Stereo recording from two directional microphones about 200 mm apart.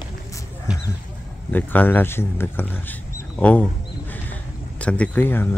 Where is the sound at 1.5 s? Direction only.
10° left (ahead or behind).